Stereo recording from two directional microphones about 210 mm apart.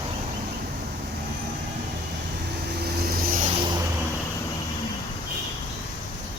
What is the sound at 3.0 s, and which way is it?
Vehicle, 45° right (ahead or behind).